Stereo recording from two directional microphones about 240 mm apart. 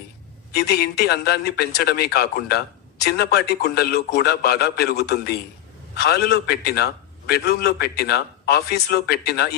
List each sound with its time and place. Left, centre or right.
0.5 s speech: left